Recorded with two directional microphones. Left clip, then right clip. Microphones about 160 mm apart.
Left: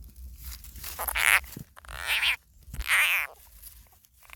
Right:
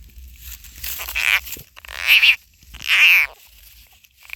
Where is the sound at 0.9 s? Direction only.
25° left (ahead or behind).